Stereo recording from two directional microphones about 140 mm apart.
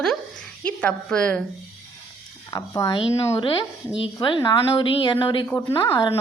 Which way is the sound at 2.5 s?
25° left (ahead or behind).